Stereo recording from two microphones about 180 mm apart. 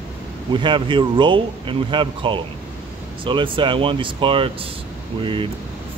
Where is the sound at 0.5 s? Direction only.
25° right (ahead or behind).